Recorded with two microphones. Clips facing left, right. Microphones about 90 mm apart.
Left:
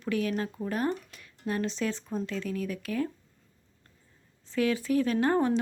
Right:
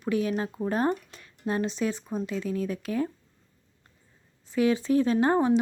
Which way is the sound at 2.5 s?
30° right (ahead or behind).